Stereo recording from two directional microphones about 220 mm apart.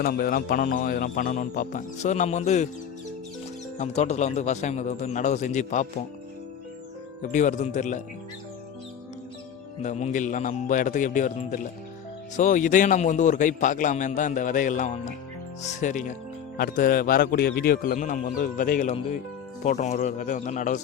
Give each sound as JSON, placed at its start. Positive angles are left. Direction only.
{"t": 0.0, "sound": "speech", "side_deg": 40}
{"t": 3.8, "sound": "speech", "side_deg": 30}
{"t": 7.2, "sound": "speech", "side_deg": 35}
{"t": 9.8, "sound": "speech", "side_deg": 30}